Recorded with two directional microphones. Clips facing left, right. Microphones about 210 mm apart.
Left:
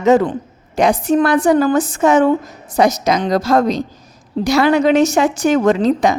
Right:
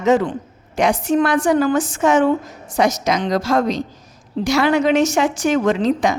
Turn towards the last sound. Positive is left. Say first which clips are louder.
# left 3 dB
turn(degrees=40)  # may be behind; listen again after turning